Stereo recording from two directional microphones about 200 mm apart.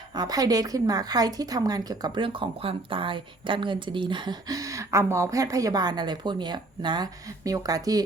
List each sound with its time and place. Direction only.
0.1 s a woman's voice: 20° right (ahead or behind)